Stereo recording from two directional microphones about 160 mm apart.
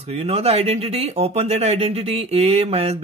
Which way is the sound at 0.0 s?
40° right (ahead or behind).